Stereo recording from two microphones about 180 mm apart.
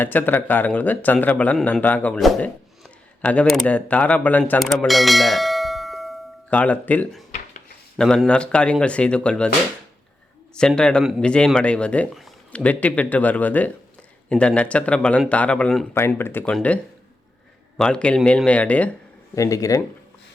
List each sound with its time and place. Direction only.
0.0 s speech: 10° left (ahead or behind)
10.5 s speech: 5° left (ahead or behind)
19.4 s speech: 20° left (ahead or behind)